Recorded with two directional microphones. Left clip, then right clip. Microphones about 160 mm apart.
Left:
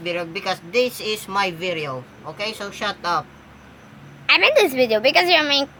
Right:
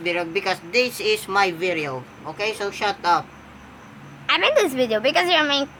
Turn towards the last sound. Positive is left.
turn(degrees=10)  # may be behind; listen again after turning